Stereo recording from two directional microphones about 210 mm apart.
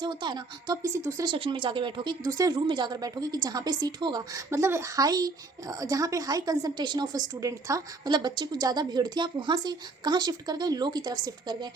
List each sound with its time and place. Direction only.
0.0 s speech: 20° right (ahead or behind)